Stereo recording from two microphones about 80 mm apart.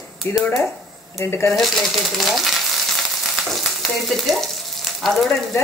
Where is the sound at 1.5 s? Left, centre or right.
Centre.